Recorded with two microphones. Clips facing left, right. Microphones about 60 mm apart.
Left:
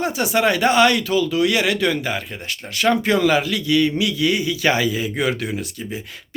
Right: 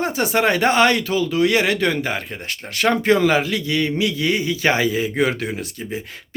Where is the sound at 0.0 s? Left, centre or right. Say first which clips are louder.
Even; right.